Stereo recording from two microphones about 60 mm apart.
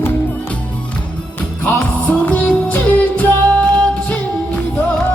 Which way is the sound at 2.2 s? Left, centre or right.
Left.